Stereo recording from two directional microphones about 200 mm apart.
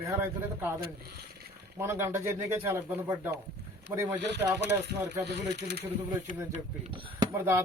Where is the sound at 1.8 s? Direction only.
15° right (ahead or behind).